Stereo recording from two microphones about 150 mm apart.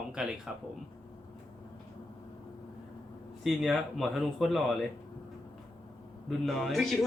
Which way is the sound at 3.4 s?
Centre (ahead or behind).